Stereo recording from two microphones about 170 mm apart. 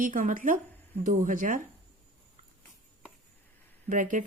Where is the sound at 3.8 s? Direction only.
50° right (ahead or behind).